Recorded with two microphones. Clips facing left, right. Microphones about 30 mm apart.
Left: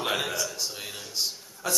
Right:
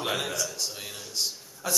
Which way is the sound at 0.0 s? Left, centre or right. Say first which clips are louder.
Left 1 dB; centre.